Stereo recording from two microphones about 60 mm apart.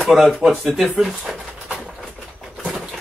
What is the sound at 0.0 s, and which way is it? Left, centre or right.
Speech, centre.